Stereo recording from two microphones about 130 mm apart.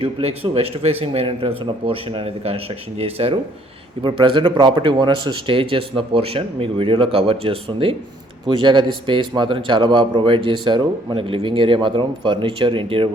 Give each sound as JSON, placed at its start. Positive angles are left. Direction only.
{"t": 0.0, "sound": "speech", "side_deg": -50}
{"t": 4.0, "sound": "a man's voice", "side_deg": -40}